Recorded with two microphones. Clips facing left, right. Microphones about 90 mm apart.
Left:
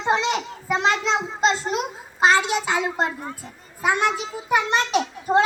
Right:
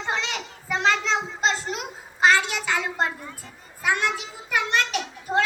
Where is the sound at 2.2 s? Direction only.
20° left (ahead or behind).